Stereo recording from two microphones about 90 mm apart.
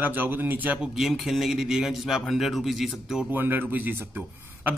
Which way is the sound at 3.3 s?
20° right (ahead or behind).